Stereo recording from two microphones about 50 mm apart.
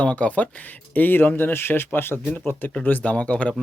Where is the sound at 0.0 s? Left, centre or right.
Left.